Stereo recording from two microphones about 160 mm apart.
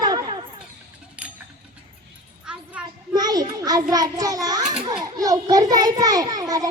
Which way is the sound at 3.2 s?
25° right (ahead or behind).